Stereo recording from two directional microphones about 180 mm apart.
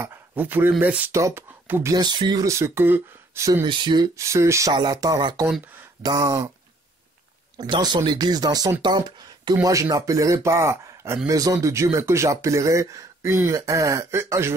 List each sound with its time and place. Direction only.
0.0 s speech: 10° right (ahead or behind)
3.6 s speech: 25° right (ahead or behind)
7.5 s speech: 25° right (ahead or behind)